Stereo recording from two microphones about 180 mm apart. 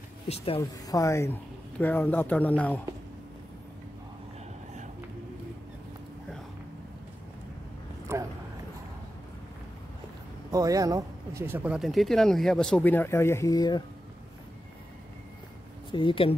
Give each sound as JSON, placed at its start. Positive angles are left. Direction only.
{"t": 0.6, "sound": "speech", "side_deg": 20}
{"t": 8.1, "sound": "a sound", "side_deg": -15}
{"t": 10.5, "sound": "speech", "side_deg": -20}
{"t": 15.9, "sound": "speech", "side_deg": 30}